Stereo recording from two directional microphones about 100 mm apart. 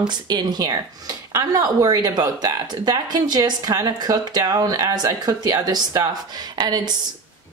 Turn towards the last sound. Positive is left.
turn(degrees=-45)  # may be behind; listen again after turning